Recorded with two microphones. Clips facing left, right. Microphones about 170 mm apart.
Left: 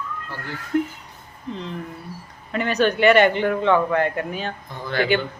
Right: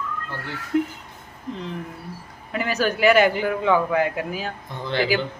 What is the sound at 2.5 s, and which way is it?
Speech, 5° right (ahead or behind).